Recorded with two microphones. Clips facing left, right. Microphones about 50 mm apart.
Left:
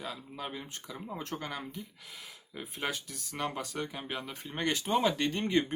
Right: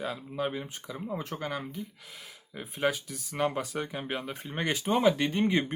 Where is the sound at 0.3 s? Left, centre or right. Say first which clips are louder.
Right 7 dB; centre.